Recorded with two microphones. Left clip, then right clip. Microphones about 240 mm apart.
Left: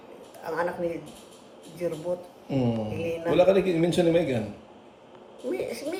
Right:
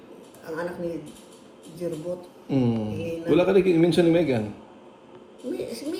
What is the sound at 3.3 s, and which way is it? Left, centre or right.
Speech, centre.